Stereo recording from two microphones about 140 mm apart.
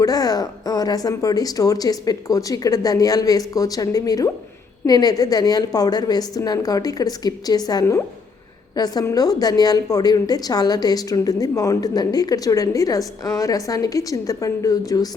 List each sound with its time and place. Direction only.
0.0 s a woman's voice: 25° left (ahead or behind)